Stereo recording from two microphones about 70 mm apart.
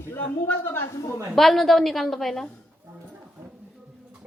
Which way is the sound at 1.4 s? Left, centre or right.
Centre.